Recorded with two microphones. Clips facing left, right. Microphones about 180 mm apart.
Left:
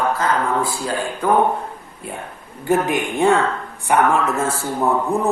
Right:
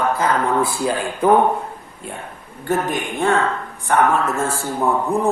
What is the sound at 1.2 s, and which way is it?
Speech, 20° right (ahead or behind).